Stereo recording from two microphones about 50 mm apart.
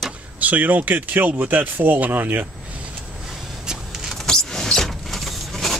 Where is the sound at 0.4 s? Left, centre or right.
Right.